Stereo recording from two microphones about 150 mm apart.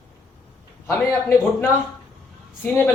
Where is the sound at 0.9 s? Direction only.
15° left (ahead or behind).